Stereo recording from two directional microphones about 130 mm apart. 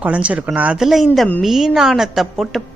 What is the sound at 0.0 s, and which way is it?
A woman's voice, 10° right (ahead or behind).